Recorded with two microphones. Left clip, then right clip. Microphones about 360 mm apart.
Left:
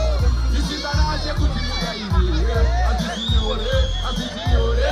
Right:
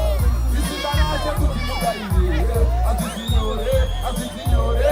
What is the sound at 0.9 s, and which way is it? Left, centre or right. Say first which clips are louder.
Music: right 1 dB; right.